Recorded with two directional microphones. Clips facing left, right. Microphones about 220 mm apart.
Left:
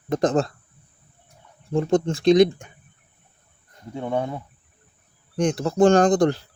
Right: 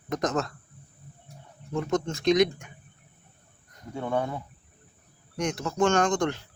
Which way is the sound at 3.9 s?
20° left (ahead or behind).